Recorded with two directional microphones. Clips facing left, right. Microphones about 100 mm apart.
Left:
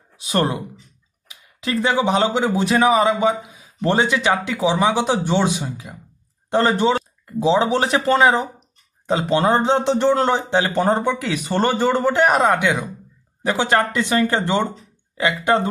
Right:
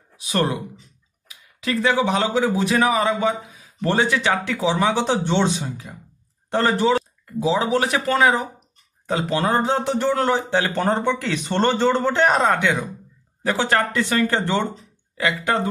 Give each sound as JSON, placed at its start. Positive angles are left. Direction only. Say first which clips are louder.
{"t": 0.3, "sound": "speech", "louder": "left 2 dB", "side_deg": 25}